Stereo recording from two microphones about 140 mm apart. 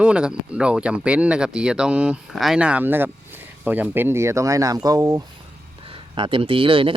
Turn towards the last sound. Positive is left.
turn(degrees=-40)  # may be behind; listen again after turning